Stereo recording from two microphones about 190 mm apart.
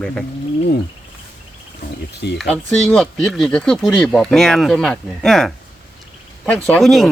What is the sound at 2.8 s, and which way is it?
Speech, 5° left (ahead or behind).